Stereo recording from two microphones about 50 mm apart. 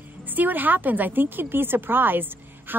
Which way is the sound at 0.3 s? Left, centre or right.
Right.